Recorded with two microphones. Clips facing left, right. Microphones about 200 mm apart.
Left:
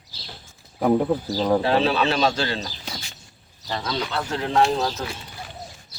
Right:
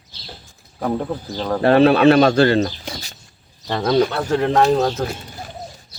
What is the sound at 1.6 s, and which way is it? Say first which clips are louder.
Speech: right 8 dB; 55° right (ahead or behind).